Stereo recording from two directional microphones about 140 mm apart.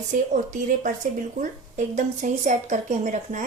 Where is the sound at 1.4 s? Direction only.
65° right (ahead or behind).